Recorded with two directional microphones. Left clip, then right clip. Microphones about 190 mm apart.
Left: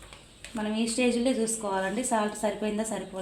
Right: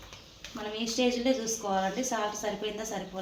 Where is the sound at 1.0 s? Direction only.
50° left (ahead or behind).